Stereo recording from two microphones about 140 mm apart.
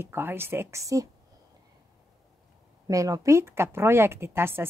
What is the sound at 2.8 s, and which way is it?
A woman's voice, 25° right (ahead or behind).